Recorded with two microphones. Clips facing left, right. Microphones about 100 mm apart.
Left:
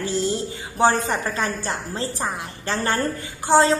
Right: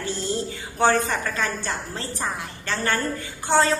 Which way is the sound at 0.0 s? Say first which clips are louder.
Left 5 dB; 25° left (ahead or behind).